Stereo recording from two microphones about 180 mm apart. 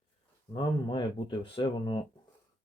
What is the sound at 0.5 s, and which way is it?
Speech, 25° left (ahead or behind).